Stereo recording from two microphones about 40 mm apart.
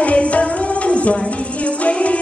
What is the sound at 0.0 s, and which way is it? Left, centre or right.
Music, left.